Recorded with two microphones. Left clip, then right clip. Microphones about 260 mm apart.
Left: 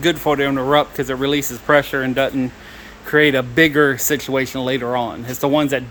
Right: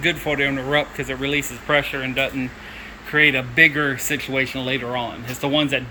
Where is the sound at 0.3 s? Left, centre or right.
Centre.